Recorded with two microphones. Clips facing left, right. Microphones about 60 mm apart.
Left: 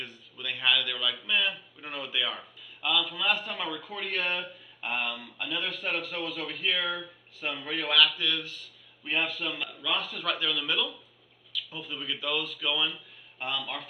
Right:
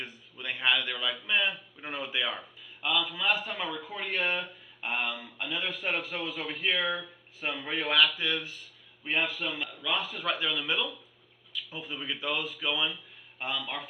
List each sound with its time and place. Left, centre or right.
0.0 s a man's voice: centre
2.3 s a man's voice: centre
9.1 s a man's voice: centre
10.3 s speech: centre